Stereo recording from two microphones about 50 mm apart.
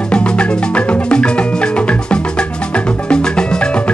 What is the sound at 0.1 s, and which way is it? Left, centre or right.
Music, left.